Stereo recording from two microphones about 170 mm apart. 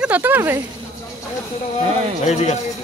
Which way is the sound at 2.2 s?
40° left (ahead or behind).